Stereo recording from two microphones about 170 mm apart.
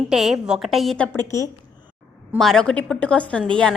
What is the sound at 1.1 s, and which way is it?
Speech, 20° left (ahead or behind).